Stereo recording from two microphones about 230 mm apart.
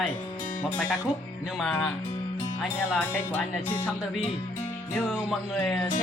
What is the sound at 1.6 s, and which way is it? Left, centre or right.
Speech, centre.